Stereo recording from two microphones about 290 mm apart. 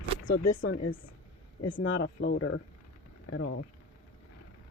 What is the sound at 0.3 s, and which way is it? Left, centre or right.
Speech, left.